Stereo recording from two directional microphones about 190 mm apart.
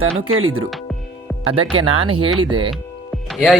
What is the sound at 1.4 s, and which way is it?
Speech, 30° right (ahead or behind).